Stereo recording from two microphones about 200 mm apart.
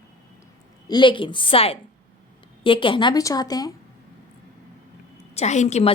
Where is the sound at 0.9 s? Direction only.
25° left (ahead or behind).